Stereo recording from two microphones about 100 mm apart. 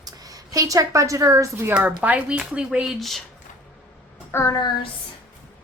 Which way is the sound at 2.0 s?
15° right (ahead or behind).